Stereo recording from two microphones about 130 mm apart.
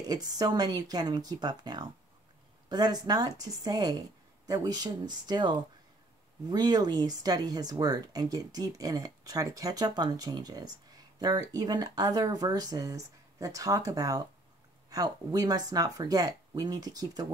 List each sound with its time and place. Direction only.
0.0 s speech: 30° right (ahead or behind)